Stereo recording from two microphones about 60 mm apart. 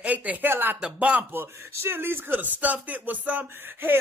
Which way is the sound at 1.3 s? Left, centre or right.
Right.